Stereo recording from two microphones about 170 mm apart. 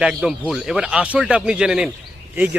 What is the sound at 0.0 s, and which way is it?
A man's voice, 5° right (ahead or behind).